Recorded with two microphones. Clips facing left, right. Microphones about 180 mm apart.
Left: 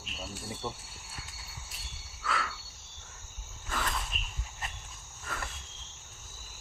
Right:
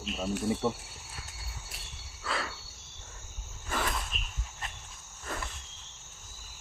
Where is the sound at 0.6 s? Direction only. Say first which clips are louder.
Right 5 dB; 65° right (ahead or behind).